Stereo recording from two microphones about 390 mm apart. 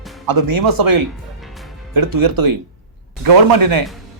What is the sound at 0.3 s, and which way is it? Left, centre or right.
A man's voice, right.